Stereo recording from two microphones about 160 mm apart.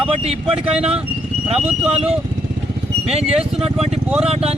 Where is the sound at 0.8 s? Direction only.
40° right (ahead or behind).